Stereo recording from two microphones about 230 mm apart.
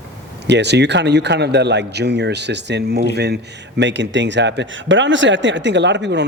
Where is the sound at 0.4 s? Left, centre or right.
Right.